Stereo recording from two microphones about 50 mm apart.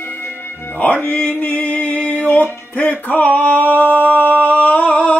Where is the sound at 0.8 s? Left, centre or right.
Left.